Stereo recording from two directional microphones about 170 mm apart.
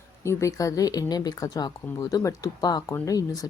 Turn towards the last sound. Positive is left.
turn(degrees=20)  # may be behind; listen again after turning